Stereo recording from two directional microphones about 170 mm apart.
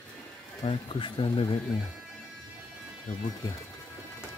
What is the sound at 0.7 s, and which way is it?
Speech, 30° left (ahead or behind).